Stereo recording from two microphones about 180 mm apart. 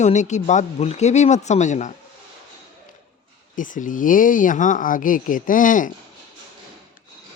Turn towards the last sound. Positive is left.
turn(degrees=45)  # may be behind; listen again after turning